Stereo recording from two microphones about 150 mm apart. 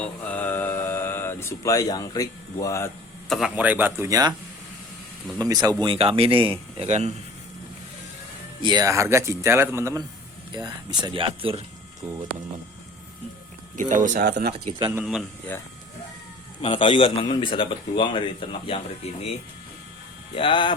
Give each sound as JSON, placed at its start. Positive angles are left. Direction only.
{"t": 0.0, "sound": "mantra", "side_deg": 10}
{"t": 3.2, "sound": "speech", "side_deg": 0}
{"t": 3.5, "sound": "speech", "side_deg": -10}
{"t": 5.4, "sound": "speech", "side_deg": -25}
{"t": 5.9, "sound": "speech", "side_deg": -40}
{"t": 6.8, "sound": "speech", "side_deg": -50}
{"t": 8.6, "sound": "speech", "side_deg": -25}
{"t": 10.5, "sound": "speech", "side_deg": -30}
{"t": 12.0, "sound": "speech", "side_deg": -5}
{"t": 13.7, "sound": "speech", "side_deg": -60}
{"t": 14.7, "sound": "speech", "side_deg": -30}
{"t": 16.6, "sound": "a man's voice", "side_deg": 35}
{"t": 20.3, "sound": "a man's voice", "side_deg": 35}